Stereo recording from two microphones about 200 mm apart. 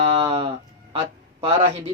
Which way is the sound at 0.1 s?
25° right (ahead or behind).